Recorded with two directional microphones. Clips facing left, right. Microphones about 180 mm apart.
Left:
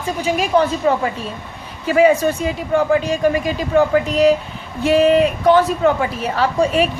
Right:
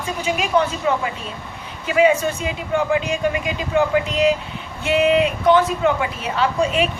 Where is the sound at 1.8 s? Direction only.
40° left (ahead or behind).